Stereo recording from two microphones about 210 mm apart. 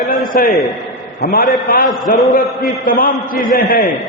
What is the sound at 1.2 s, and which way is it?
Speech, 45° left (ahead or behind).